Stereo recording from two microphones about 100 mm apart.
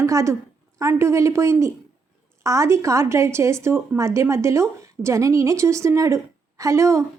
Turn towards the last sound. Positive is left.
turn(degrees=-30)  # may be behind; listen again after turning